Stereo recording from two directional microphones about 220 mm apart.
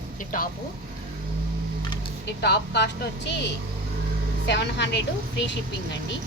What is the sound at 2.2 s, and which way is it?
A woman's voice, 50° left (ahead or behind).